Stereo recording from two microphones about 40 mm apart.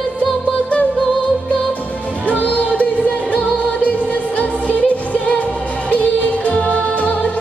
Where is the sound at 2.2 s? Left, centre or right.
Left.